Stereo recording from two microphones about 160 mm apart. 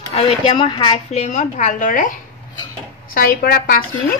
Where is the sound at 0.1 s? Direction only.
35° left (ahead or behind).